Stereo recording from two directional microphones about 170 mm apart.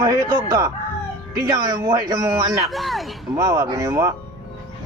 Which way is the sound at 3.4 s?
20° right (ahead or behind).